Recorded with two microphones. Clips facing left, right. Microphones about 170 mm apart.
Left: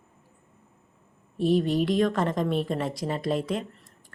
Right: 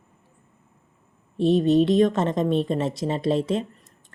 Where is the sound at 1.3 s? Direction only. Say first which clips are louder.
Right 5 dB; 25° right (ahead or behind).